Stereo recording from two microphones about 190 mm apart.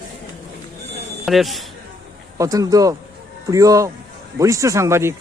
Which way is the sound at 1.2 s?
Centre (ahead or behind).